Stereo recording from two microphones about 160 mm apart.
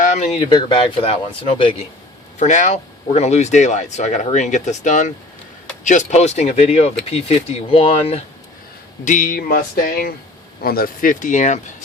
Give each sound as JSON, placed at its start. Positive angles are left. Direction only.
{"t": 0.0, "sound": "a sound", "side_deg": 50}
{"t": 0.3, "sound": "speech", "side_deg": 35}
{"t": 2.4, "sound": "speech", "side_deg": 50}
{"t": 9.0, "sound": "speech", "side_deg": 55}